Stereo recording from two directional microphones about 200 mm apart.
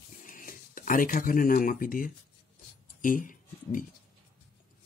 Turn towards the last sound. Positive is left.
turn(degrees=40)  # may be behind; listen again after turning